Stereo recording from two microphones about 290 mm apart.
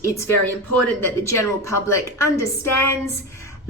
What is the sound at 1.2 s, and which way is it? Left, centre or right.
Speech, centre.